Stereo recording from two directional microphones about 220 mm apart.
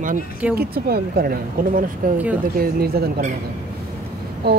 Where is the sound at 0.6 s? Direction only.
45° right (ahead or behind).